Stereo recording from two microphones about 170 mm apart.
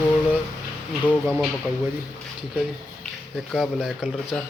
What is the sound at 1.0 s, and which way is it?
Speech, 10° left (ahead or behind).